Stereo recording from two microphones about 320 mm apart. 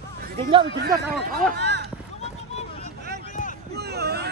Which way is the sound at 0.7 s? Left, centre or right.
Right.